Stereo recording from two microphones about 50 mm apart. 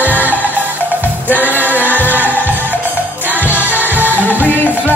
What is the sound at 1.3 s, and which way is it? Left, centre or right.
Music, right.